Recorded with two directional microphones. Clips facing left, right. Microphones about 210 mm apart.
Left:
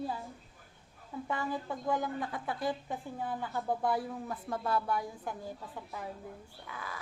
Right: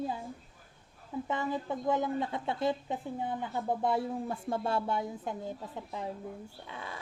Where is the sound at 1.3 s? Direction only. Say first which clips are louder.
Right 2 dB; 20° right (ahead or behind).